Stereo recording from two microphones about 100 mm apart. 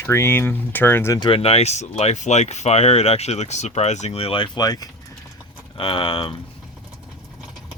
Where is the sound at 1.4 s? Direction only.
90° left; by 4.5 s 70° left (ahead or behind).